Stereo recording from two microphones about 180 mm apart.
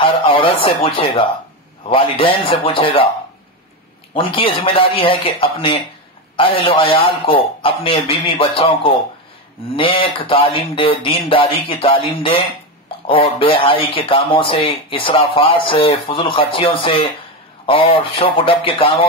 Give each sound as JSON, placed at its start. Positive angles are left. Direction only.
{"t": 0.0, "sound": "speech", "side_deg": 30}
{"t": 4.1, "sound": "speech", "side_deg": 30}